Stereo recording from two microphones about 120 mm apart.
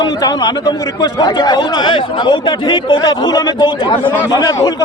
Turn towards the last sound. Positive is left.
turn(degrees=30)  # may be behind; listen again after turning